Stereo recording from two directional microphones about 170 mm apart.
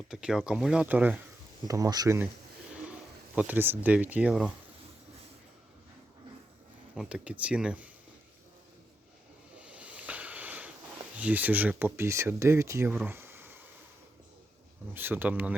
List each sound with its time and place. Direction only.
0.1 s speech: 5° right (ahead or behind)
1.6 s speech: 20° right (ahead or behind)
3.3 s speech: 10° right (ahead or behind)
6.9 s speech: 5° right (ahead or behind)
9.6 s a sound: 5° right (ahead or behind)
11.2 s speech: 10° right (ahead or behind)
13.1 s a sound: 15° right (ahead or behind)
14.9 s speech: 10° right (ahead or behind)